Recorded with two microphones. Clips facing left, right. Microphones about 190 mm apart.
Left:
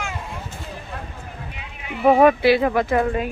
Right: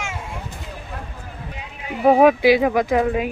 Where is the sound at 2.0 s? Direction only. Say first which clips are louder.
Right 1 dB; 10° right (ahead or behind).